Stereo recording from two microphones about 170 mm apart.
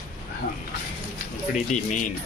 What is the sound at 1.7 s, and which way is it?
Speech, 50° left (ahead or behind).